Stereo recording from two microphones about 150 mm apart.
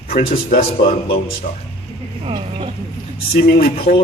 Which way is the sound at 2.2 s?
35° right (ahead or behind).